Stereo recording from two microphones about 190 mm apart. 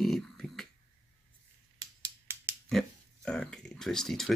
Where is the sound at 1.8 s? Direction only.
15° right (ahead or behind).